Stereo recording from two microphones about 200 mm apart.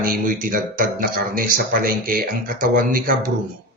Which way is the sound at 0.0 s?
45° right (ahead or behind).